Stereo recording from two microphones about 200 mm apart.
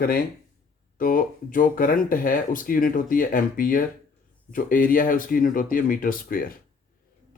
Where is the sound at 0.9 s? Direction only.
45° left (ahead or behind).